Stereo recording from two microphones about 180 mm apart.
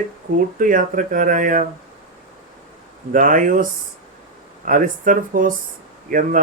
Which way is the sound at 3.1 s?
50° right (ahead or behind).